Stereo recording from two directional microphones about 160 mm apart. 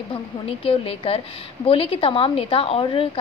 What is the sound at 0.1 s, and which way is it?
A woman's voice, 35° left (ahead or behind).